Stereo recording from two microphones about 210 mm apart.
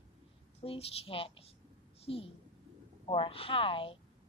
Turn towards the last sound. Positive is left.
turn(degrees=25)  # may be behind; listen again after turning